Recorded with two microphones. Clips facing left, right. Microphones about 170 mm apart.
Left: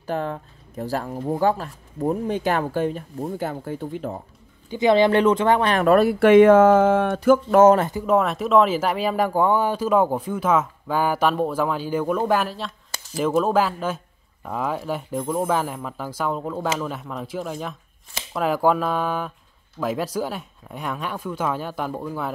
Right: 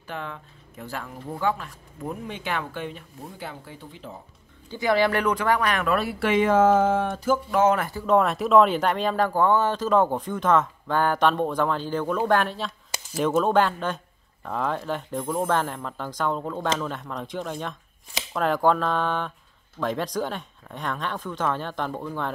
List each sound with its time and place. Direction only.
0.0 s speech: 40° left (ahead or behind)
4.6 s speech: 20° left (ahead or behind); by 7.6 s 60° left (ahead or behind)
7.8 s speech: 15° left (ahead or behind)
8.1 s speech: centre (ahead or behind)